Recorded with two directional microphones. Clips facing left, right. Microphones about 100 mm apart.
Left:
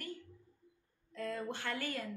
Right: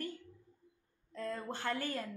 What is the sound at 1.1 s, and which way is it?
Speech, 35° right (ahead or behind).